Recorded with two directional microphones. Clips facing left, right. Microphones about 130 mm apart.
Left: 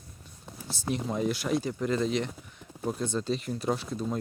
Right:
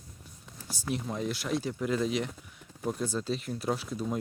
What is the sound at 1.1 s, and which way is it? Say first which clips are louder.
Speech: left 6 dB; centre (ahead or behind).